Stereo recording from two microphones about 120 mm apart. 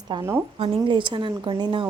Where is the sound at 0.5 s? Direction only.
50° right (ahead or behind).